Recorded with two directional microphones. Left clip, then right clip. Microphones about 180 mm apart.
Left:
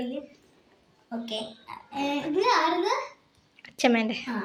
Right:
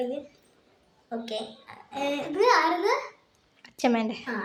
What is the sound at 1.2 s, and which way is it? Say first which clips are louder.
A child's voice: left 2 dB; 20° right (ahead or behind).